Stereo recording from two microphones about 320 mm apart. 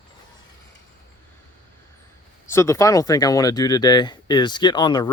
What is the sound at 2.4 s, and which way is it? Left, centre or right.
Speech, centre.